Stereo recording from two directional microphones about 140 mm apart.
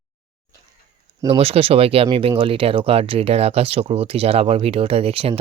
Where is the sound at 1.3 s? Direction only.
45° right (ahead or behind).